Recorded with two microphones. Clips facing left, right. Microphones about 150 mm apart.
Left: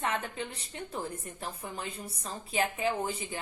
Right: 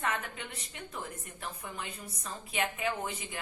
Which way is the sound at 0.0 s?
30° left (ahead or behind).